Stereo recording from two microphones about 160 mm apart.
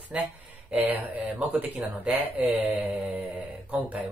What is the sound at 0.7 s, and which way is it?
Speech, 10° right (ahead or behind).